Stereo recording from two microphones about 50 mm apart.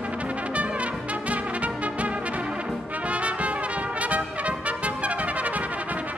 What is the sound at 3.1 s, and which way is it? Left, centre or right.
Brass instrument, right.